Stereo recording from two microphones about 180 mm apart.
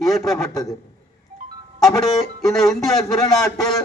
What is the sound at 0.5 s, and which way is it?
Speech, 20° left (ahead or behind).